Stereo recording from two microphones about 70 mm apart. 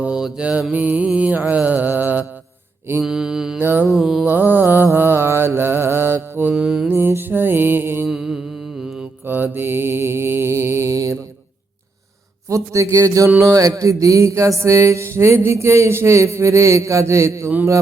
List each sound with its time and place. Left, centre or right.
0.0 s mantra: centre
0.7 s mantra: right
3.0 s mantra: centre
3.6 s mantra: right
3.8 s mantra: centre
4.3 s mantra: right
6.5 s mantra: centre
6.8 s music: right
8.0 s mantra: centre
9.2 s mantra: right
12.5 s a sound: right